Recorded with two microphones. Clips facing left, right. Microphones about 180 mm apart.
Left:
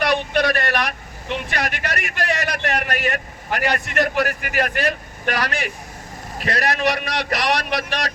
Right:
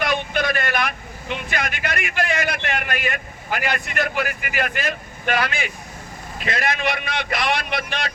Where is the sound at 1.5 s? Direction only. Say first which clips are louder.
Right 1 dB; 35° left (ahead or behind).